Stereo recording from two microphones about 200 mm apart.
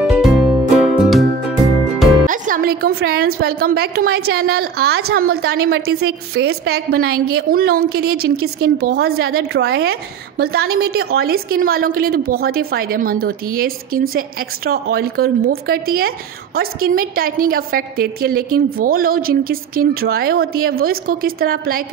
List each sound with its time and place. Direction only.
0.0 s music: centre (ahead or behind)
2.2 s a woman's voice: 40° right (ahead or behind)